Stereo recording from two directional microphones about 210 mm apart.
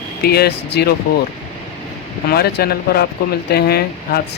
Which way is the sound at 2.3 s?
50° left (ahead or behind).